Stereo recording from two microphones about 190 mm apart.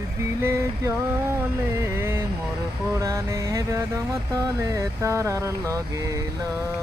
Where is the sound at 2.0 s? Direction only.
15° right (ahead or behind).